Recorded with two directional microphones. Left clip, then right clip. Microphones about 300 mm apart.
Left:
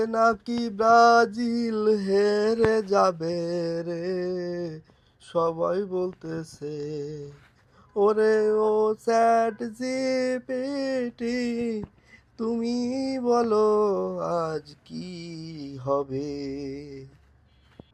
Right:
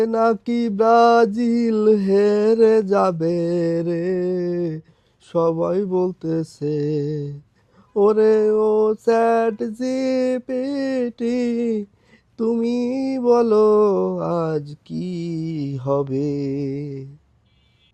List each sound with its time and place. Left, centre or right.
0.0 s mantra: right